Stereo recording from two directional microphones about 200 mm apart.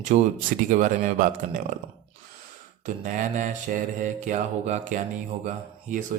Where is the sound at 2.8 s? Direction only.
40° right (ahead or behind).